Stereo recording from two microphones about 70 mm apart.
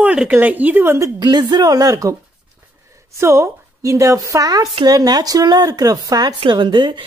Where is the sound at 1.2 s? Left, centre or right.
Right.